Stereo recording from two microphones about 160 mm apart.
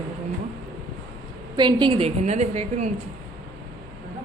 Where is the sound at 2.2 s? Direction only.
45° right (ahead or behind).